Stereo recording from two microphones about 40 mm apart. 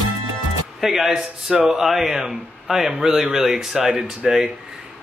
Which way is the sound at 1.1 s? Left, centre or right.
Right.